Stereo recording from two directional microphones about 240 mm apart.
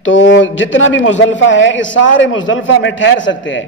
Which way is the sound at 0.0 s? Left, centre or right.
Left.